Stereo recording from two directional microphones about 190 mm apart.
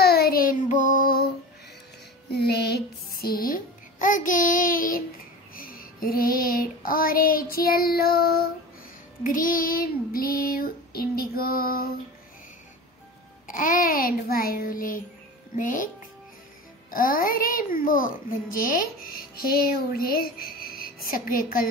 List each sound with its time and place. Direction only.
0.0 s child singing: 55° left (ahead or behind)
2.3 s a sound: 60° left (ahead or behind)
3.4 s a child's voice: 45° left (ahead or behind)
13.5 s a child's voice: 45° left (ahead or behind)
16.9 s a child's voice: 50° left (ahead or behind)